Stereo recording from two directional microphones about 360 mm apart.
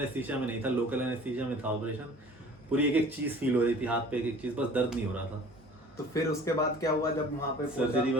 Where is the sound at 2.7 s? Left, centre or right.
Centre.